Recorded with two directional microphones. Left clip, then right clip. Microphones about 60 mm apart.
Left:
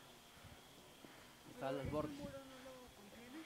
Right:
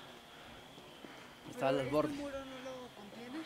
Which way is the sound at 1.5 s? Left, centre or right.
Right.